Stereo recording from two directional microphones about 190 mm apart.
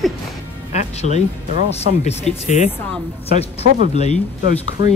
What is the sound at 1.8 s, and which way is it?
Speech, 35° left (ahead or behind).